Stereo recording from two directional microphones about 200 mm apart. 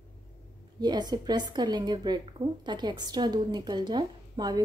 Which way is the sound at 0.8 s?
20° right (ahead or behind).